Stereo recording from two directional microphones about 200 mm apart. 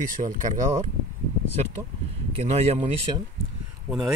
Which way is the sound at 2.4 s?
30° right (ahead or behind).